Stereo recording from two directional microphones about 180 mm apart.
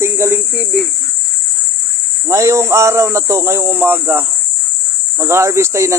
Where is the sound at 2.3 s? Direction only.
15° right (ahead or behind).